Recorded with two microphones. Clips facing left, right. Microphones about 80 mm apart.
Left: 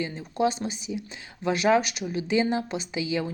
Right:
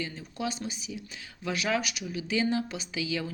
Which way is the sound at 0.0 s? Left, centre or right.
Left.